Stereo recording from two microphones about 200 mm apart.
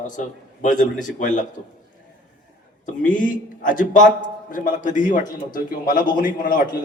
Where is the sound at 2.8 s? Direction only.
40° left (ahead or behind).